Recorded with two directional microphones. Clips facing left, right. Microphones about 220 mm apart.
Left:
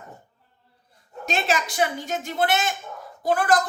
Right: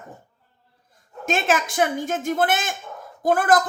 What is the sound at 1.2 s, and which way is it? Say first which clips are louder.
A woman's voice: right 3 dB; 50° right (ahead or behind).